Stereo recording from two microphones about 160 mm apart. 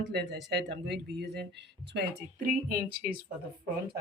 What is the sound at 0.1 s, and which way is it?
Speech, 90° right.